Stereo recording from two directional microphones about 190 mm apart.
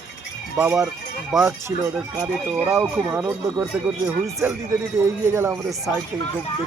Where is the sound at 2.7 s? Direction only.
10° right (ahead or behind).